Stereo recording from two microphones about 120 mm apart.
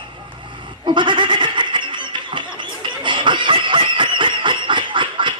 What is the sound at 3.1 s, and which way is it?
Snicker, 40° right (ahead or behind).